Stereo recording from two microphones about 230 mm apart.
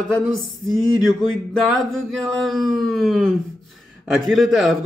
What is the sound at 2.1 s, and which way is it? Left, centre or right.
Speech, centre.